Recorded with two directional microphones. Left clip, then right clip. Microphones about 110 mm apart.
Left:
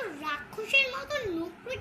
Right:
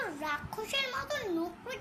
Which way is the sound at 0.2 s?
40° right (ahead or behind).